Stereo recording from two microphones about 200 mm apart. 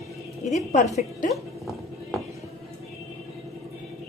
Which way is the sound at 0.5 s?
35° left (ahead or behind).